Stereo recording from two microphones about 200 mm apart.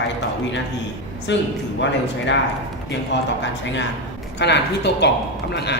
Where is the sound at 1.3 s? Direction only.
60° left (ahead or behind).